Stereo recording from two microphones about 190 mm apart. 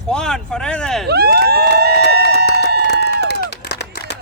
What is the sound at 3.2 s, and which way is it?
Run, 60° left (ahead or behind).